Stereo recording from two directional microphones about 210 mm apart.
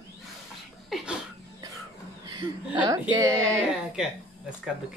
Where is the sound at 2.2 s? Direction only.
20° right (ahead or behind).